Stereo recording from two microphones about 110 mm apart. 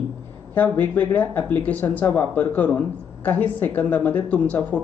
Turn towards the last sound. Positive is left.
turn(degrees=15)  # may be behind; listen again after turning